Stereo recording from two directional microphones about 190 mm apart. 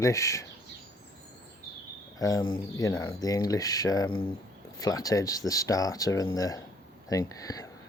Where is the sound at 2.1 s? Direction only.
20° left (ahead or behind).